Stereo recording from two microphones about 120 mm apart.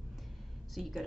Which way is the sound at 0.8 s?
Centre (ahead or behind).